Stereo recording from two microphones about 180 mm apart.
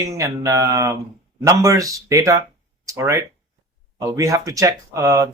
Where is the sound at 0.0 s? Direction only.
15° right (ahead or behind).